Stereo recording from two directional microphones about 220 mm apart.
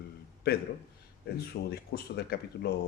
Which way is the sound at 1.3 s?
45° left (ahead or behind).